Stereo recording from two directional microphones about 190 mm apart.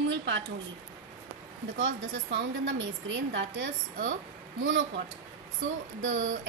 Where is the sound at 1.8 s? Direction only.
80° right.